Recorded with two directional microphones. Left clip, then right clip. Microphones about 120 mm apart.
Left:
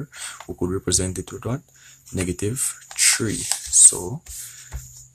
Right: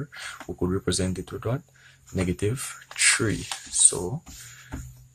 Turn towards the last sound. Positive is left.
turn(degrees=30)  # may be behind; listen again after turning